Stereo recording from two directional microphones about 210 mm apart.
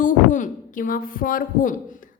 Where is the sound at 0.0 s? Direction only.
40° left (ahead or behind).